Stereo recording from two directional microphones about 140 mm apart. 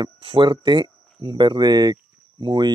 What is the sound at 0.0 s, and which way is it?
Speech, 35° right (ahead or behind).